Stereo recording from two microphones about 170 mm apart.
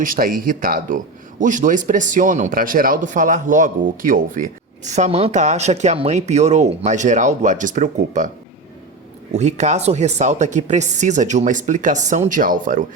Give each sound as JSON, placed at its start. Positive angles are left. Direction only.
{"t": 0.0, "sound": "speech", "side_deg": -55}
{"t": 9.3, "sound": "speech", "side_deg": -40}